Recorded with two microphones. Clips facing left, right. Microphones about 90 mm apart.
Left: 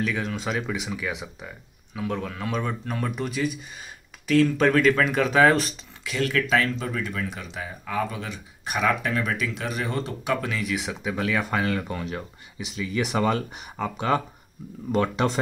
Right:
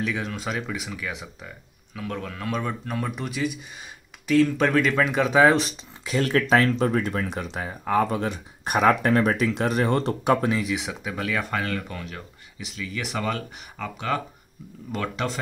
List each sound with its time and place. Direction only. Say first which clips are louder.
0.0 s speech: left 1 dB; 5° right (ahead or behind)
6.0 s speech: right 3 dB; 35° right (ahead or behind)
10.9 s speech: left 2 dB; centre (ahead or behind)
11.5 s speech: left 2 dB; 10° left (ahead or behind)
11.9 s speech: left 5 dB; 25° left (ahead or behind)